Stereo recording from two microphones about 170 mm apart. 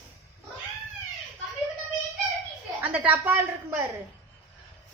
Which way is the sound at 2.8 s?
10° right (ahead or behind).